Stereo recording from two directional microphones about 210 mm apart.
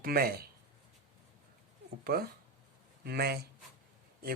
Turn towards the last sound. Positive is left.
turn(degrees=-50)  # may be behind; listen again after turning